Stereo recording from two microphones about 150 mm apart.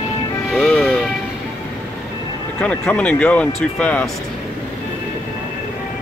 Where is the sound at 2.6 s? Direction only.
10° left (ahead or behind).